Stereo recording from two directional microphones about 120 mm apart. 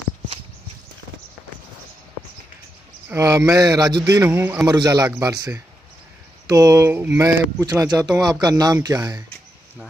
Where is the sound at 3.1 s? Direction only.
25° right (ahead or behind).